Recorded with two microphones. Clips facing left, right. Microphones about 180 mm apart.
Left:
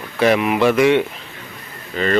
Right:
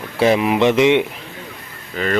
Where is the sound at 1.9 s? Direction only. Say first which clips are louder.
Left 2 dB; 5° right (ahead or behind).